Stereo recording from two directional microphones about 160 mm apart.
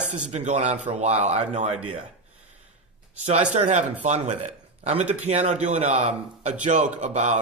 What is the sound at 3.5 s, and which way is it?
Speech, 45° right (ahead or behind).